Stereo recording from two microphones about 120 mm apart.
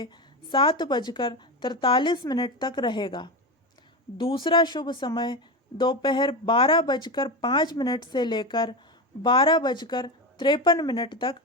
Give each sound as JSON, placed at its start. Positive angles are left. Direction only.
{"t": 0.5, "sound": "speech", "side_deg": 45}